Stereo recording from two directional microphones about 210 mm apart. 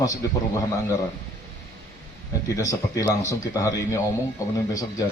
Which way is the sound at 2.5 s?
15° left (ahead or behind).